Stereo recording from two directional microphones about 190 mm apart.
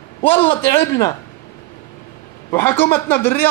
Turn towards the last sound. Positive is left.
turn(degrees=10)  # may be behind; listen again after turning